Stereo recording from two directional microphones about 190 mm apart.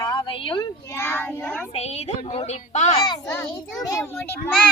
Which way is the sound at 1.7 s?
35° left (ahead or behind).